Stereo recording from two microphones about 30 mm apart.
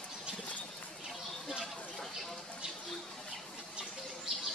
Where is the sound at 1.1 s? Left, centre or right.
Centre.